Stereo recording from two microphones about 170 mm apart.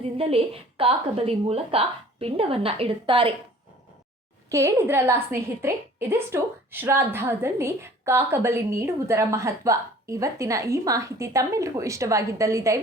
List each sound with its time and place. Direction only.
0.0 s a woman's voice: 35° right (ahead or behind)
4.4 s a woman's voice: 15° right (ahead or behind)